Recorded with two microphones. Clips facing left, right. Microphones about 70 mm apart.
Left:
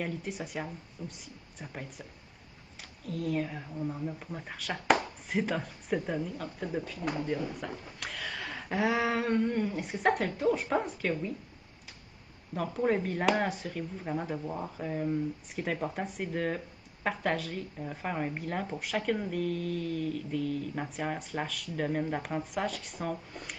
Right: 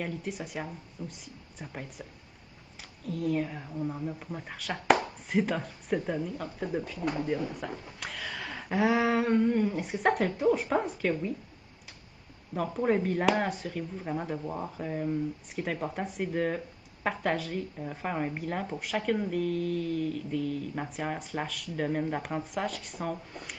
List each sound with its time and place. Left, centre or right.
0.0 s speech: centre
12.7 s speech: centre